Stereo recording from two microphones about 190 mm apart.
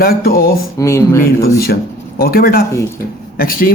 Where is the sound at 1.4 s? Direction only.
55° left (ahead or behind).